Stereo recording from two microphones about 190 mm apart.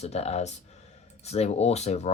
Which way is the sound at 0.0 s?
35° left (ahead or behind).